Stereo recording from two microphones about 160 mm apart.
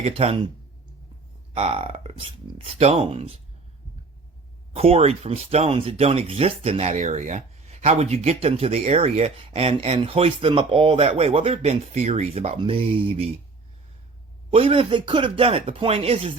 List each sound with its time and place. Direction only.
0.0 s speech: 40° right (ahead or behind)
1.5 s speech: 40° right (ahead or behind)
4.7 s speech: 40° right (ahead or behind)
14.5 s speech: 35° right (ahead or behind)